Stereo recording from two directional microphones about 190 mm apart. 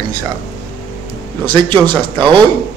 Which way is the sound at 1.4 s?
25° right (ahead or behind).